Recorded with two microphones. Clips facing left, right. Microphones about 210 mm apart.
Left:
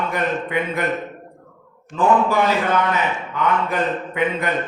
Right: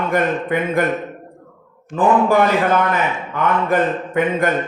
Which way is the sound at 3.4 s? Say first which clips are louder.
Right 4 dB; 50° right (ahead or behind).